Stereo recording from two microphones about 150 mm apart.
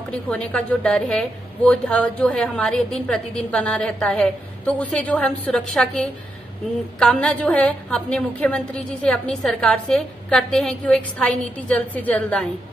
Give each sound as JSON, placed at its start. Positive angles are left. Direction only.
{"t": 0.1, "sound": "a woman's voice", "side_deg": 5}